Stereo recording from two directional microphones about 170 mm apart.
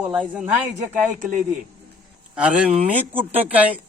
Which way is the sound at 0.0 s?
10° right (ahead or behind).